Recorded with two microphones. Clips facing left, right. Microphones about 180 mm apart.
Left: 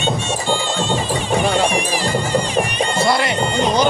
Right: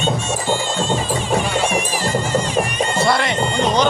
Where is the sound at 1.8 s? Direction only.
45° right (ahead or behind).